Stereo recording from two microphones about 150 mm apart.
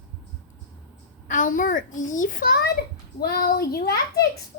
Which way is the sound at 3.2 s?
90° left.